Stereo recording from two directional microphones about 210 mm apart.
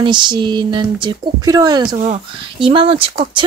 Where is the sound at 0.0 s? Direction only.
20° right (ahead or behind).